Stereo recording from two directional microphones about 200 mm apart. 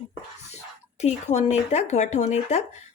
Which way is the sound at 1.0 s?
35° left (ahead or behind).